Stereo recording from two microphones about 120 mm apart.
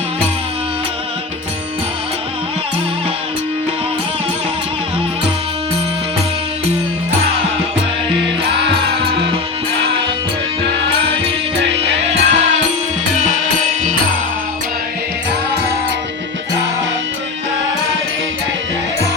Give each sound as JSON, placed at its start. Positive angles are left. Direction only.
{"t": 11.8, "sound": "music", "side_deg": -60}
{"t": 13.1, "sound": "music", "side_deg": -90}